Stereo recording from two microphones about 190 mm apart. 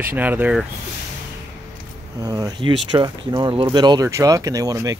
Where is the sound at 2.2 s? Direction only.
20° right (ahead or behind).